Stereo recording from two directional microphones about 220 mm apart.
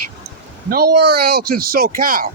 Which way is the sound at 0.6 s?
45° right (ahead or behind).